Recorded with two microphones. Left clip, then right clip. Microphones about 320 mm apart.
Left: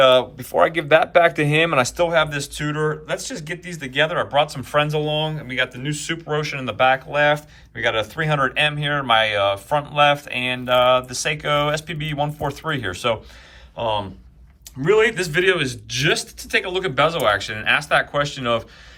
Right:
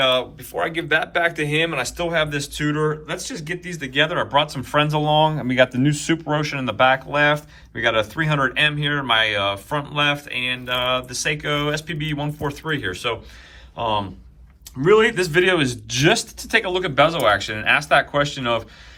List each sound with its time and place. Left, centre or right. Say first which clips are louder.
0.0 s speech: left 5 dB; centre